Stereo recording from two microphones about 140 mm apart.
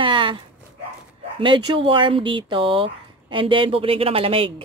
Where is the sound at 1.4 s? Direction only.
35° right (ahead or behind).